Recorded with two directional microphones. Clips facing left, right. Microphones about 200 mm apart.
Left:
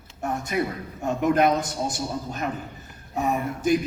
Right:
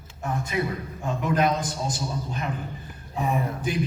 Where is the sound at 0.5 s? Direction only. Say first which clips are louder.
Left 1 dB; 50° left (ahead or behind).